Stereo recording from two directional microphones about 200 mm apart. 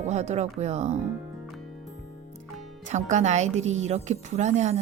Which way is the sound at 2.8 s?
35° right (ahead or behind).